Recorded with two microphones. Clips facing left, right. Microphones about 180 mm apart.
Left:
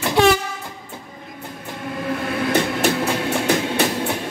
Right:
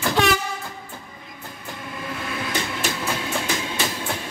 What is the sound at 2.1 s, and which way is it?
Train, 55° left (ahead or behind).